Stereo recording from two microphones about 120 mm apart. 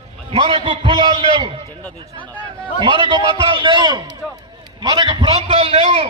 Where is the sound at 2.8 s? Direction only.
45° right (ahead or behind).